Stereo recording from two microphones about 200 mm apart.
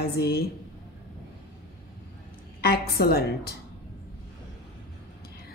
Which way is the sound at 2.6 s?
50° left (ahead or behind).